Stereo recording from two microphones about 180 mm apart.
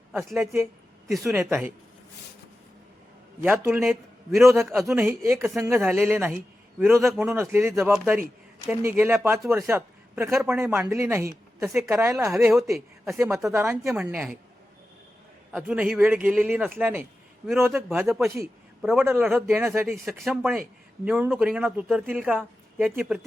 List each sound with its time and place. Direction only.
0.1 s speech: centre (ahead or behind)
0.3 s a woman's voice: 15° right (ahead or behind)
3.4 s a man's voice: 10° right (ahead or behind)
4.8 s speech: centre (ahead or behind)
5.0 s a man's voice: 15° right (ahead or behind)
12.5 s speech: centre (ahead or behind)
13.1 s a man's voice: 15° right (ahead or behind)
15.5 s a man's voice: 5° right (ahead or behind)
19.0 s a man's voice: 15° right (ahead or behind)
20.1 s a woman's voice: centre (ahead or behind)